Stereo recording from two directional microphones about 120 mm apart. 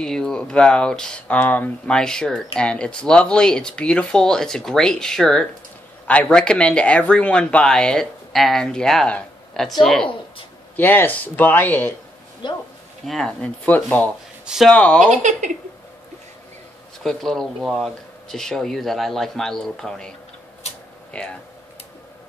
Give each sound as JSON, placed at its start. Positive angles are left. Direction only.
{"t": 0.0, "sound": "speech", "side_deg": 5}
{"t": 10.8, "sound": "speech", "side_deg": 15}
{"t": 12.4, "sound": "speech", "side_deg": 40}
{"t": 13.0, "sound": "speech", "side_deg": 5}
{"t": 14.4, "sound": "a sound", "side_deg": -5}
{"t": 14.7, "sound": "speech", "side_deg": 10}
{"t": 17.0, "sound": "speech", "side_deg": 5}
{"t": 21.1, "sound": "speech", "side_deg": 10}